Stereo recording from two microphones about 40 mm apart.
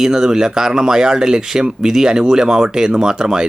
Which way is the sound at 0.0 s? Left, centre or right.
Centre.